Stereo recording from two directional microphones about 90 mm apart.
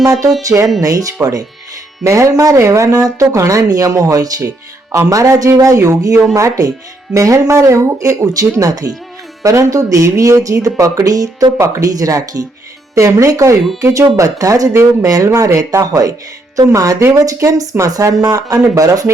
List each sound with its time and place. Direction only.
0.0 s speech: 40° right (ahead or behind)